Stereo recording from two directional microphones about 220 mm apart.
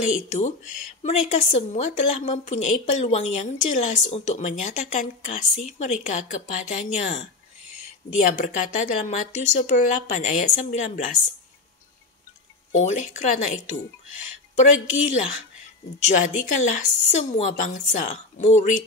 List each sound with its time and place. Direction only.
1.0 s a woman's voice: 30° left (ahead or behind)
12.7 s a woman's voice: 35° left (ahead or behind)
14.5 s a woman's voice: 35° left (ahead or behind)